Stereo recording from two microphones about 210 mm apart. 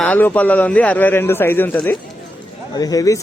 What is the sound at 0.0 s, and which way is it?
Speech, 10° left (ahead or behind).